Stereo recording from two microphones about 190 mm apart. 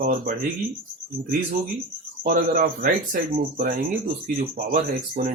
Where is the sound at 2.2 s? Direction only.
50° right (ahead or behind).